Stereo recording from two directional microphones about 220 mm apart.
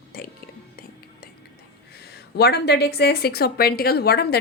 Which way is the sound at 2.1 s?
45° left (ahead or behind).